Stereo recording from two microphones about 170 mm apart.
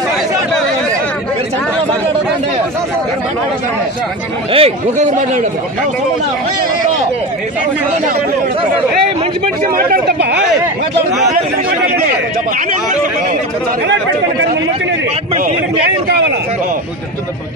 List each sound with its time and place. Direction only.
4.5 s speech: 35° right (ahead or behind)
9.6 s speech: 55° right (ahead or behind); by 10.4 s 75° right (ahead or behind)